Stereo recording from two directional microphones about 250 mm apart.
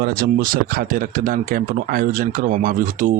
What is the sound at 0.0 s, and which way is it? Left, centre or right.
A man's voice, right.